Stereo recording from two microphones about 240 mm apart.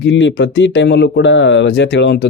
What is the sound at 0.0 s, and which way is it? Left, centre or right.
Speech, left.